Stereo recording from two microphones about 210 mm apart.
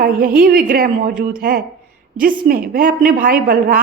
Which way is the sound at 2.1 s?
45° right (ahead or behind).